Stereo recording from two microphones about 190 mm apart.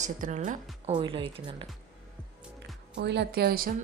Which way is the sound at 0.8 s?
25° right (ahead or behind).